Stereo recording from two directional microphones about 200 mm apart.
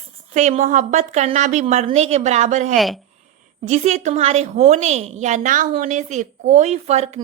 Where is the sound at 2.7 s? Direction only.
Centre (ahead or behind).